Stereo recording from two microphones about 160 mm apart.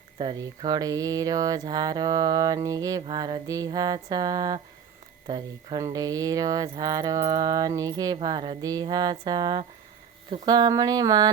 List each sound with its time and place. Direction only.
0.2 s speech: 25° right (ahead or behind)